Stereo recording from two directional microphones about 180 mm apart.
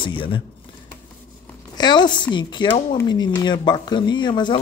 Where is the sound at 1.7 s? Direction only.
25° left (ahead or behind).